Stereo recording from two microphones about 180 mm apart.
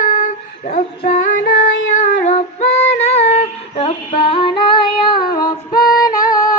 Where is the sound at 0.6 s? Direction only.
45° left (ahead or behind).